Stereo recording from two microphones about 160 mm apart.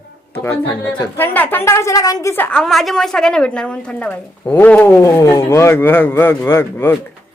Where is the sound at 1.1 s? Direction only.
10° left (ahead or behind).